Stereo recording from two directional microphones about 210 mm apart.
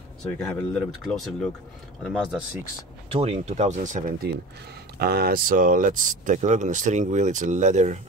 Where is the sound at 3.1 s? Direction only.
30° right (ahead or behind).